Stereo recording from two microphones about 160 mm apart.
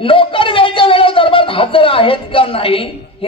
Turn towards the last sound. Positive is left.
turn(degrees=35)  # may be behind; listen again after turning